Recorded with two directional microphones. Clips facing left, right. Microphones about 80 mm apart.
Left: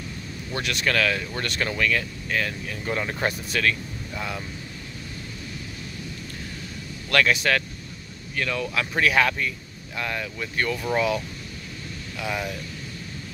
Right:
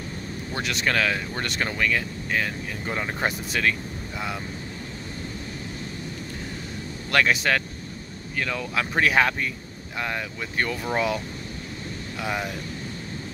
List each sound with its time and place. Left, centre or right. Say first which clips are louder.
0.5 s speech: even; right
7.1 s speech: even; right